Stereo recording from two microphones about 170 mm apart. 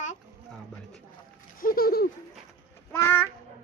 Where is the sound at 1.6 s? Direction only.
60° left (ahead or behind).